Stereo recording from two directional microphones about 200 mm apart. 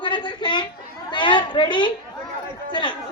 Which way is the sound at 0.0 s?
20° left (ahead or behind).